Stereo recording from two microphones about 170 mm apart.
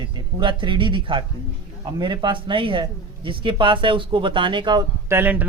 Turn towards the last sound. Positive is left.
turn(degrees=-10)  # may be behind; listen again after turning